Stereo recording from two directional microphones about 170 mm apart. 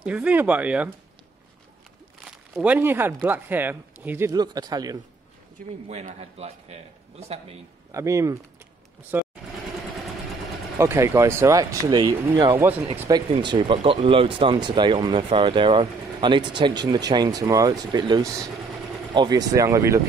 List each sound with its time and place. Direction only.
0.0 s speech: 5° right (ahead or behind)
2.5 s speech: 10° right (ahead or behind)
4.3 s speech: 25° right (ahead or behind)
6.1 s a man's voice: 35° right (ahead or behind)
7.9 s speech: 15° right (ahead or behind)
9.1 s vehicle: 15° right (ahead or behind)
10.8 s speech: 15° right (ahead or behind)
13.4 s speech: 30° right (ahead or behind)